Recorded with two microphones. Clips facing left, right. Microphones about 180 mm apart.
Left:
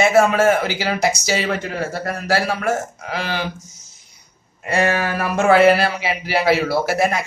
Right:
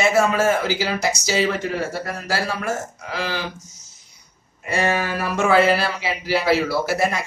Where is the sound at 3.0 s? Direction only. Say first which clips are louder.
Right 1 dB; 60° left (ahead or behind).